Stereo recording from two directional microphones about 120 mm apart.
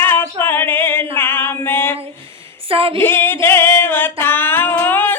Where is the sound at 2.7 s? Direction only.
50° right (ahead or behind).